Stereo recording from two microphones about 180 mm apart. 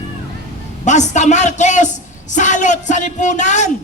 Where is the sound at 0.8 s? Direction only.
40° left (ahead or behind).